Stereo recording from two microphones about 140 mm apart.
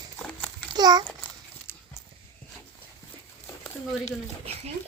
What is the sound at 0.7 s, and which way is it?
Babbling, 30° right (ahead or behind).